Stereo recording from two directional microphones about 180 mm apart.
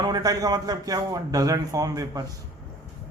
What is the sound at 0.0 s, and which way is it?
A man's voice, 20° right (ahead or behind).